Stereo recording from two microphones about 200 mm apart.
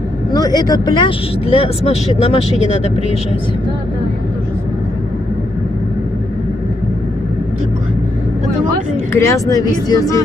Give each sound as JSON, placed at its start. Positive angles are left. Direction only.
{"t": 0.3, "sound": "speech", "side_deg": 20}
{"t": 9.1, "sound": "speech", "side_deg": 15}